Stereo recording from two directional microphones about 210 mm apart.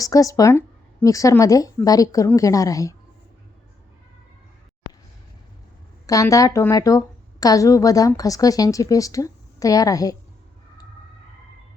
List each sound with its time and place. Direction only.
0.0 s a woman's voice: 15° left (ahead or behind)
6.1 s a woman's voice: 15° left (ahead or behind)